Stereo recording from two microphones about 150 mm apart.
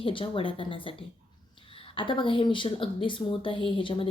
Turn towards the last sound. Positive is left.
turn(degrees=35)  # may be behind; listen again after turning